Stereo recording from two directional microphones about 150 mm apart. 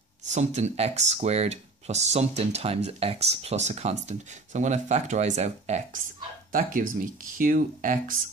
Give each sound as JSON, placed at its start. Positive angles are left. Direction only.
{"t": 0.2, "sound": "speech", "side_deg": -50}
{"t": 6.5, "sound": "speech", "side_deg": -65}